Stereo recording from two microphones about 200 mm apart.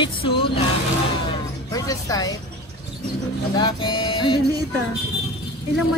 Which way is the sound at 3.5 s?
20° left (ahead or behind).